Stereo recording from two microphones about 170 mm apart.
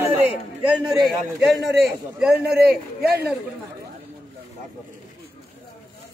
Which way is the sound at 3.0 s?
65° right (ahead or behind).